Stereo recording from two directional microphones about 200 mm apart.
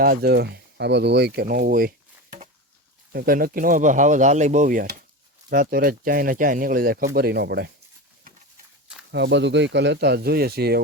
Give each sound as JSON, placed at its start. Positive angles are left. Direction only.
{"t": 0.0, "sound": "speech", "side_deg": -50}
{"t": 3.1, "sound": "speech", "side_deg": -45}
{"t": 9.1, "sound": "speech", "side_deg": -60}